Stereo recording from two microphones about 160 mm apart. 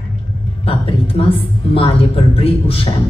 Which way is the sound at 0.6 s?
35° left (ahead or behind).